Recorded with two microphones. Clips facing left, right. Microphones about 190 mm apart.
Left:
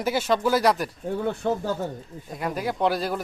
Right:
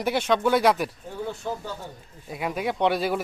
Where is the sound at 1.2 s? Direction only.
60° left (ahead or behind).